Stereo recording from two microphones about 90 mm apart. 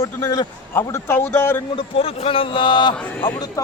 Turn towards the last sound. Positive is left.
turn(degrees=65)  # may be behind; listen again after turning